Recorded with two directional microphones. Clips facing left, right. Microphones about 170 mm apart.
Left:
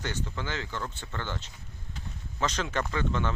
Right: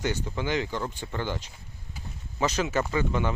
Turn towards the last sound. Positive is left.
turn(degrees=-10)  # may be behind; listen again after turning